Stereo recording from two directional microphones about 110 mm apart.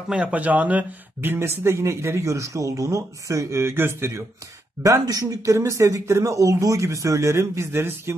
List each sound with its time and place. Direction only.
0.1 s speech: 10° right (ahead or behind)
4.8 s speech: 30° right (ahead or behind)